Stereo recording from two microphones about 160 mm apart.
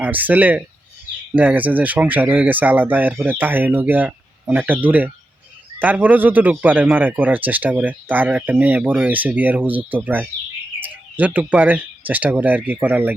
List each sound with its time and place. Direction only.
0.0 s speech: 10° right (ahead or behind)